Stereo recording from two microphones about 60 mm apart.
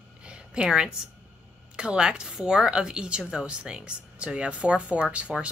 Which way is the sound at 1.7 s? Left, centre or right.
Centre.